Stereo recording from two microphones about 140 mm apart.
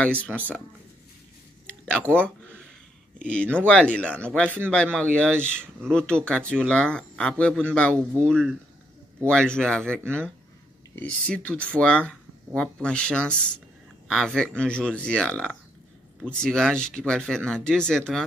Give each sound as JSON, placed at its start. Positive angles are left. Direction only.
{"t": 0.0, "sound": "speech", "side_deg": 10}
{"t": 1.9, "sound": "speech", "side_deg": 10}
{"t": 7.9, "sound": "speech", "side_deg": -20}
{"t": 8.3, "sound": "speech", "side_deg": 5}